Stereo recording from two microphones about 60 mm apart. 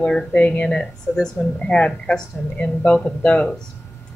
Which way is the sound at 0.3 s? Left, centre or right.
Left.